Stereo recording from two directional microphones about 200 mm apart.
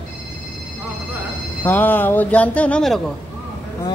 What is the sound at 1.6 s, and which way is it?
Speech, 10° left (ahead or behind).